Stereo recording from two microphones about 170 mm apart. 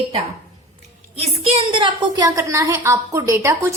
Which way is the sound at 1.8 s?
25° right (ahead or behind).